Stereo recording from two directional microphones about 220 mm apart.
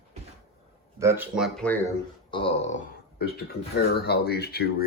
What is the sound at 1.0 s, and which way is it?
Speech, 10° right (ahead or behind).